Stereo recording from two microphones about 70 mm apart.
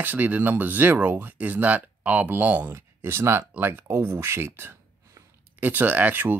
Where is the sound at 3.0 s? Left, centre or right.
Right.